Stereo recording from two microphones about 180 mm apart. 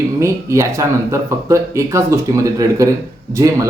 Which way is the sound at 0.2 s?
15° right (ahead or behind).